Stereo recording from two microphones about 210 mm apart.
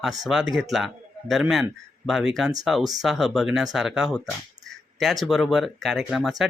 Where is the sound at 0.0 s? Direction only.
Centre (ahead or behind).